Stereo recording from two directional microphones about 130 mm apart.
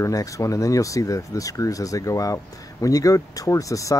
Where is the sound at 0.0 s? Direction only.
25° left (ahead or behind).